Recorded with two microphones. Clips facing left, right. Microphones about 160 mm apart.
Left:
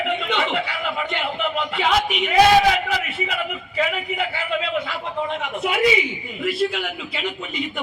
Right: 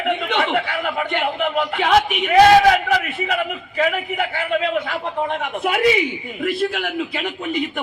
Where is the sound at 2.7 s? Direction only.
50° right (ahead or behind).